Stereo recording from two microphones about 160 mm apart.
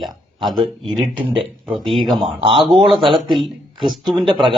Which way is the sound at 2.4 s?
35° right (ahead or behind).